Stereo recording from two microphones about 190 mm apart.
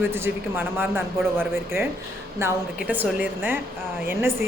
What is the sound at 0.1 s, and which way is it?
Speech, 10° right (ahead or behind).